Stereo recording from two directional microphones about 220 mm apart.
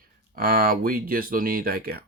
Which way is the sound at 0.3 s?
40° right (ahead or behind).